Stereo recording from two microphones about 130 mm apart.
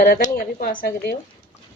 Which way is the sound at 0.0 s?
85° left.